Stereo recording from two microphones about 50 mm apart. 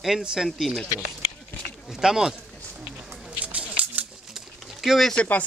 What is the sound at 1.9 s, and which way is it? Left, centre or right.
Speech, centre.